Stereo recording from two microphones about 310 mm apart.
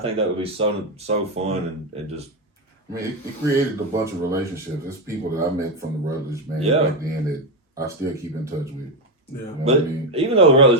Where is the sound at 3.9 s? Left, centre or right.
Centre.